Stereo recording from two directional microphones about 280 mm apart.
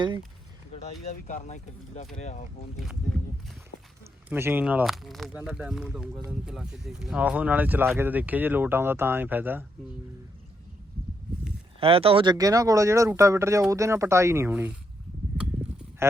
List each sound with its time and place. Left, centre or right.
1.0 s speech: left
4.3 s speech: centre
11.8 s speech: centre